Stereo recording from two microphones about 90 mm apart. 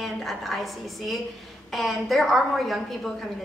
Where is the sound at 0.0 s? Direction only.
Centre (ahead or behind).